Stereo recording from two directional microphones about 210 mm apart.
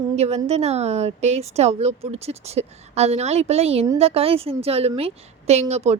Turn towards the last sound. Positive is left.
turn(degrees=-30)  # may be behind; listen again after turning